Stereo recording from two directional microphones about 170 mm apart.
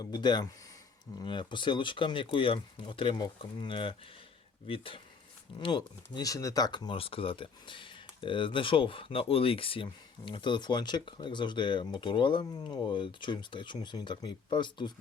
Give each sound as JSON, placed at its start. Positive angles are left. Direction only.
{"t": 0.0, "sound": "speech", "side_deg": 25}